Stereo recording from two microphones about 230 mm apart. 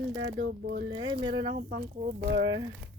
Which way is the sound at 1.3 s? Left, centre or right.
Right.